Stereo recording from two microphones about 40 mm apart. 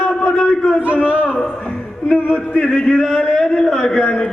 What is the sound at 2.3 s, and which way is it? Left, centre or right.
Speech, left.